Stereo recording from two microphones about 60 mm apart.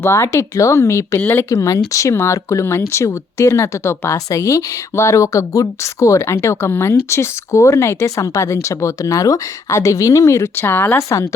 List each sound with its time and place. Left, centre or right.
0.0 s speech: left
10.9 s speech: left